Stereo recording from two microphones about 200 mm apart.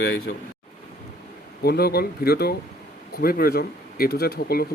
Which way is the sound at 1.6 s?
50° left (ahead or behind).